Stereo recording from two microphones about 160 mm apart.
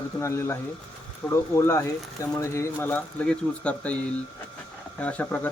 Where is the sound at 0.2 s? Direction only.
15° left (ahead or behind).